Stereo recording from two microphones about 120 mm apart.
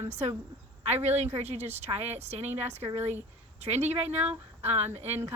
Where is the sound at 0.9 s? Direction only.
65° right (ahead or behind).